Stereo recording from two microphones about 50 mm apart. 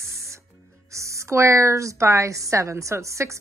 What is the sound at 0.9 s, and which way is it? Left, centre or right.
A woman's voice, right.